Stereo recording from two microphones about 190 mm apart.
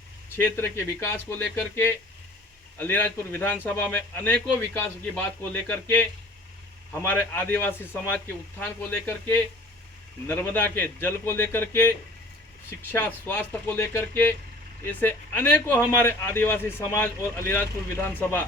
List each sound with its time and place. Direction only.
0.3 s speech: 15° left (ahead or behind)